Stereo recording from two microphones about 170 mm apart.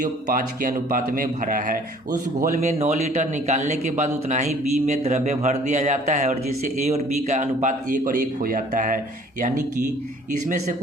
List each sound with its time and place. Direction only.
0.0 s a man's voice: 50° right (ahead or behind)
2.4 s a man's voice: 45° right (ahead or behind)
10.4 s a man's voice: 45° right (ahead or behind)